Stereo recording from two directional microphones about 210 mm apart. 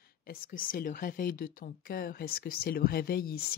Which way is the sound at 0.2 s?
45° left (ahead or behind).